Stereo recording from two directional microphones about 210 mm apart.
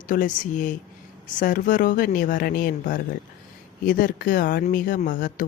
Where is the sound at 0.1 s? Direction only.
40° left (ahead or behind).